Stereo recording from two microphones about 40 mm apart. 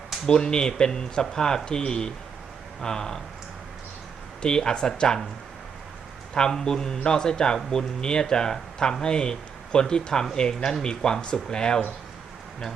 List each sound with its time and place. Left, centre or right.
0.3 s speech: left
4.4 s speech: centre
6.3 s speech: centre